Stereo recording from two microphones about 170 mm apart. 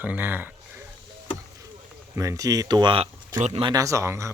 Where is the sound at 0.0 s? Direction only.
10° right (ahead or behind).